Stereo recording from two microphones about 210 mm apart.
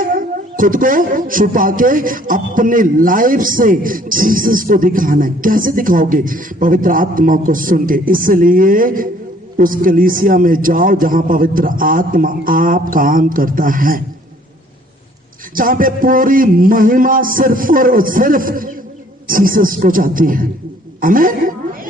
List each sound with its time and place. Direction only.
0.0 s a man's voice: 40° right (ahead or behind)
15.5 s a man's voice: 40° right (ahead or behind)